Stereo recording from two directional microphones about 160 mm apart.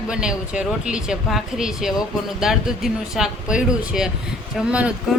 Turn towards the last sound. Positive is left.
turn(degrees=-5)  # may be behind; listen again after turning